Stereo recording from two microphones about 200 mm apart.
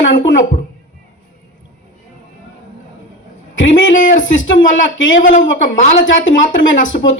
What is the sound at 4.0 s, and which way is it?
Speech, 40° left (ahead or behind).